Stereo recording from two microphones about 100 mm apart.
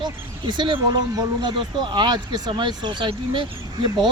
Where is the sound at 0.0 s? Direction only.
50° right (ahead or behind).